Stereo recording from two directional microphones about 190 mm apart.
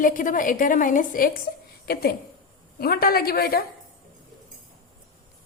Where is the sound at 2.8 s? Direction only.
55° left (ahead or behind).